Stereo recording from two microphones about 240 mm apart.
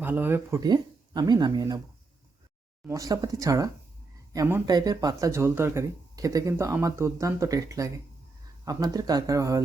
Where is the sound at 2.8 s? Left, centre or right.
Centre.